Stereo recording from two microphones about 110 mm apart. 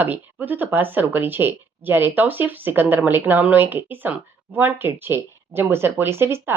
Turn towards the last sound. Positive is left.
turn(degrees=-20)  # may be behind; listen again after turning